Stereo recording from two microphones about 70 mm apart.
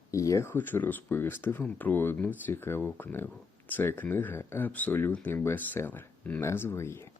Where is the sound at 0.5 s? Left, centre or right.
Left.